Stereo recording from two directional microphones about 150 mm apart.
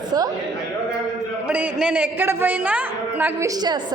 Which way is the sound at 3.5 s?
25° right (ahead or behind).